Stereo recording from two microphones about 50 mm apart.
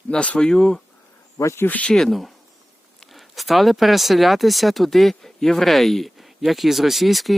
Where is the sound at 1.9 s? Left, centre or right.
Centre.